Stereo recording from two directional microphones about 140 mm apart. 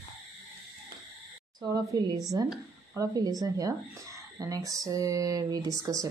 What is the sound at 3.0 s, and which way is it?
Speech, 25° right (ahead or behind).